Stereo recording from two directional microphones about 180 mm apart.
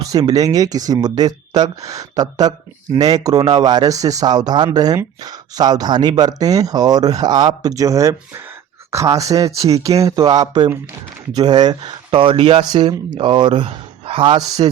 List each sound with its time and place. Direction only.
0.0 s speech: 20° right (ahead or behind)
9.1 s speech: 20° right (ahead or behind)